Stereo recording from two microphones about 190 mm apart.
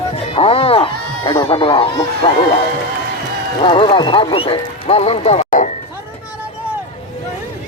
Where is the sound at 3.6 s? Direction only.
25° left (ahead or behind).